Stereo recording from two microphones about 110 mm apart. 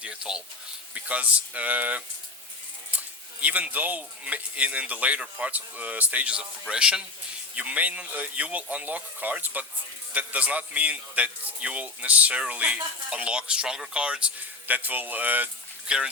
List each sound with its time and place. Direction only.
0.0 s a man's voice: 10° right (ahead or behind)
3.4 s a man's voice: 15° right (ahead or behind)